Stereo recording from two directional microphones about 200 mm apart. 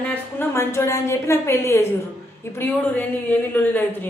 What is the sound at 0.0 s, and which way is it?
A woman's voice, 10° left (ahead or behind).